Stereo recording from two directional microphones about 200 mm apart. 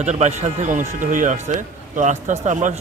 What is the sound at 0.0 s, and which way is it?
Speech, 35° right (ahead or behind).